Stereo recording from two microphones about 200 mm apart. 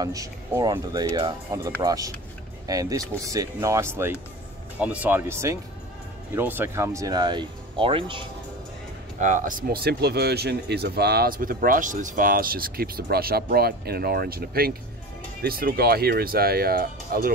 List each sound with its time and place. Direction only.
0.0 s speech: 15° right (ahead or behind)
9.2 s speech: 40° right (ahead or behind)